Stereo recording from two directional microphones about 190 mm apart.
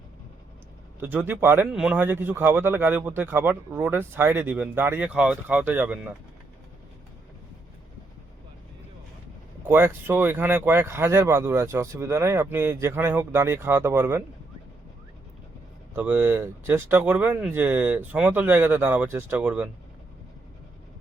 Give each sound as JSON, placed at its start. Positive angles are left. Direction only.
{"t": 0.9, "sound": "speech", "side_deg": -10}
{"t": 9.6, "sound": "speech", "side_deg": -10}
{"t": 16.0, "sound": "speech", "side_deg": -10}